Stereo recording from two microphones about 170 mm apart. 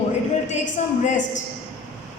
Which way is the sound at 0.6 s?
50° left (ahead or behind).